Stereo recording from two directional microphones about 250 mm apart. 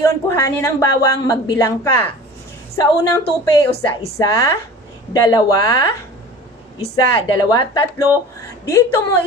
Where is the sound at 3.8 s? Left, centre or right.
Centre.